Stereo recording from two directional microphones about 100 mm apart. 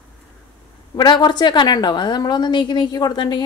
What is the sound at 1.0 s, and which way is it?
A woman's voice, 45° left (ahead or behind).